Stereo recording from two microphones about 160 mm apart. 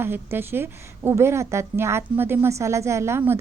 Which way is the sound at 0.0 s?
15° right (ahead or behind).